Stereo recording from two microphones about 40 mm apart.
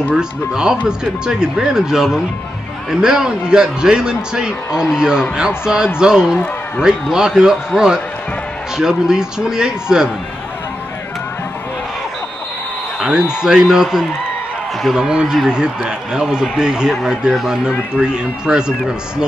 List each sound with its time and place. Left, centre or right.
0.1 s a man's voice: centre
13.0 s a man's voice: centre